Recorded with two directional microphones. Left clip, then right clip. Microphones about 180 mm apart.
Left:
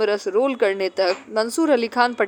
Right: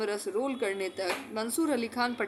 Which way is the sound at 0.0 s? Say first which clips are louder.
Left 12 dB; 40° left (ahead or behind).